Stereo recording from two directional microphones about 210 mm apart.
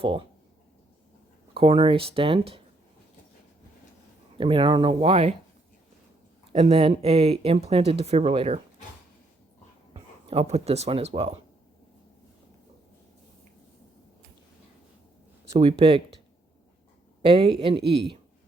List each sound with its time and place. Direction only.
0.0 s speech: 25° right (ahead or behind)
1.5 s speech: 25° right (ahead or behind)
4.4 s speech: 25° right (ahead or behind)
6.5 s speech: 30° right (ahead or behind)
9.9 s speech: 30° right (ahead or behind)
15.5 s speech: 25° right (ahead or behind)
17.2 s speech: 25° right (ahead or behind)